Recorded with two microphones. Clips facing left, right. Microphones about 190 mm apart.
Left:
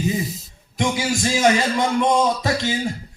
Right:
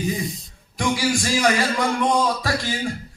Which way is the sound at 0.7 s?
20° left (ahead or behind).